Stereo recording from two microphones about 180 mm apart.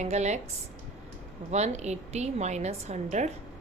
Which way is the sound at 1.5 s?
40° right (ahead or behind).